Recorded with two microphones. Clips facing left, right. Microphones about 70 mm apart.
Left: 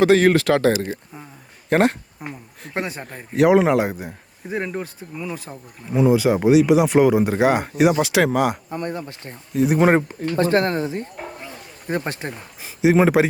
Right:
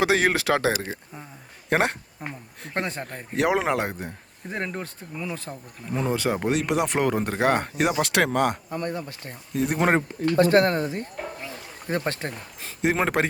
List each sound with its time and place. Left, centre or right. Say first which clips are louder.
0.0 s speech: left 7 dB; centre
8.7 s speech: left 2 dB; left
9.5 s speech: left 6 dB; centre
10.4 s speech: left 1 dB; left
11.9 s speech: left 2 dB; centre